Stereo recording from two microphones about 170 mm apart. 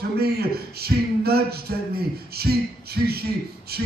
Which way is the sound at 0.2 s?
65° right (ahead or behind).